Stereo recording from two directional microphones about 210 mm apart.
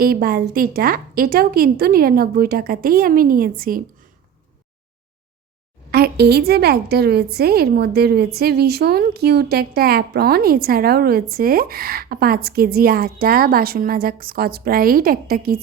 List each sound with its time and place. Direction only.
0.0 s a woman's voice: 45° right (ahead or behind)
5.9 s a woman's voice: 50° right (ahead or behind)